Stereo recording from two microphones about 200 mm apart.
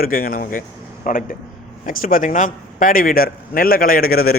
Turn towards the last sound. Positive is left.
turn(degrees=50)  # may be behind; listen again after turning